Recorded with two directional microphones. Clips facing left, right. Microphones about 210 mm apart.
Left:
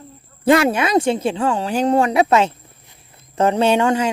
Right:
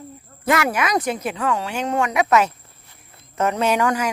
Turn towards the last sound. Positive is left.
turn(degrees=25)  # may be behind; listen again after turning